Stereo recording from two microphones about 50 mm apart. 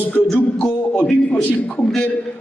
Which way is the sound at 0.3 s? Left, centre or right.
Left.